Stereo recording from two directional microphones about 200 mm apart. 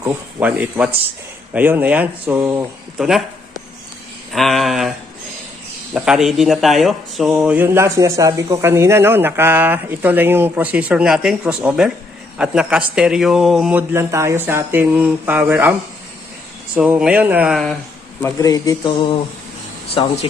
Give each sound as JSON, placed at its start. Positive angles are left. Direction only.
{"t": 0.0, "sound": "speech", "side_deg": -10}
{"t": 3.0, "sound": "speech", "side_deg": 0}
{"t": 4.3, "sound": "a sound", "side_deg": 0}
{"t": 5.9, "sound": "speech", "side_deg": -5}
{"t": 16.7, "sound": "speech", "side_deg": -5}
{"t": 18.2, "sound": "speech", "side_deg": 15}